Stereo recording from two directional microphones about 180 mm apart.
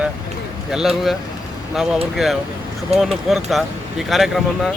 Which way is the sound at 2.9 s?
35° right (ahead or behind).